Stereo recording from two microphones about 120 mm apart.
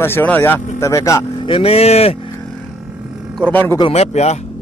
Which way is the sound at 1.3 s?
45° left (ahead or behind).